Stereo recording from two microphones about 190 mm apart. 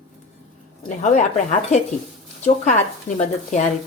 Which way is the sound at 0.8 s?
40° left (ahead or behind).